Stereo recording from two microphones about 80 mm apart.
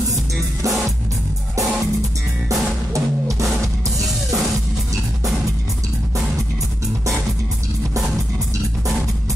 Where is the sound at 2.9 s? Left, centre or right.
Right.